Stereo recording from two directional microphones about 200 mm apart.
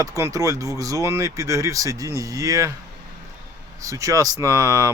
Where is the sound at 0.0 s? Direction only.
15° right (ahead or behind).